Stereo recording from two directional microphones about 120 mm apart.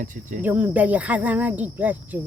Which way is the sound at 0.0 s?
90° right.